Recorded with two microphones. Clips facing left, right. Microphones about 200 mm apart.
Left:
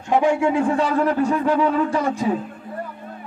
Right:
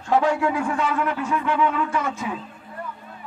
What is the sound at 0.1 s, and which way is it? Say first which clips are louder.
Speech: left 2 dB; 15° left (ahead or behind).